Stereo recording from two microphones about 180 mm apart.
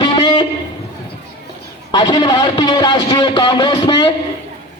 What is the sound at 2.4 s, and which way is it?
A man's voice, 30° left (ahead or behind).